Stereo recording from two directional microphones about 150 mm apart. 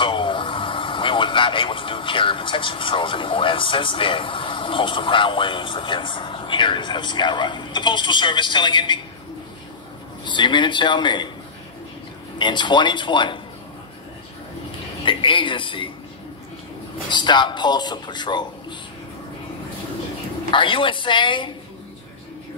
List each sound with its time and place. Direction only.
0.0 s speech: 35° left (ahead or behind)
10.2 s speech: 30° left (ahead or behind)
12.4 s speech: 30° left (ahead or behind)
15.0 s speech: 35° left (ahead or behind)
17.1 s speech: 30° left (ahead or behind)
20.5 s speech: 35° left (ahead or behind)